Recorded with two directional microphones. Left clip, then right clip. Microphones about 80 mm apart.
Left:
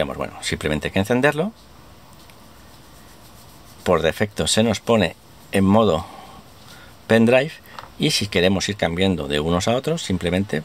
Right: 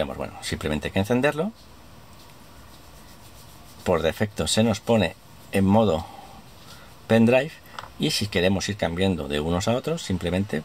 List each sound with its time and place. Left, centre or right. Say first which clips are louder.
0.0 s speech: left 4 dB; left
3.8 s speech: left 4 dB; left
7.1 s speech: left 4 dB; left